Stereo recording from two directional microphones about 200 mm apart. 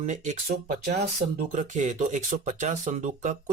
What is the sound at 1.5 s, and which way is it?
Speech, 35° right (ahead or behind).